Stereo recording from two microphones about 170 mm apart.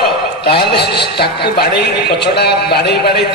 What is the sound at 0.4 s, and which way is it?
A man's voice, 70° left (ahead or behind).